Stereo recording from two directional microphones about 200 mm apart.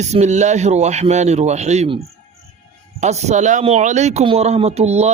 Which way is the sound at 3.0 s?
35° right (ahead or behind).